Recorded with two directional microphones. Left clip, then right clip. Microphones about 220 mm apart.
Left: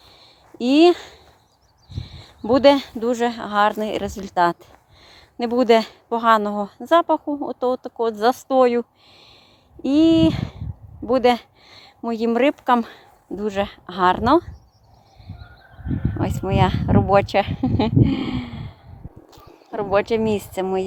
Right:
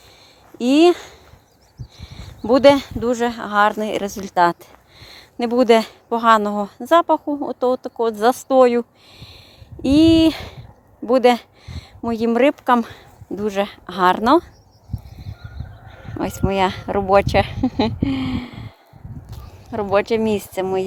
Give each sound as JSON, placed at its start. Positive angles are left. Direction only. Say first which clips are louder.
{"t": 0.6, "sound": "speech", "louder": "right 1 dB", "side_deg": 0}
{"t": 16.0, "sound": "speech", "louder": "right 3 dB", "side_deg": 0}